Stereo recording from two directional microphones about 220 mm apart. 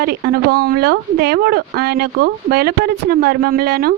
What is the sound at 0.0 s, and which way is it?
A woman's voice, 45° right (ahead or behind).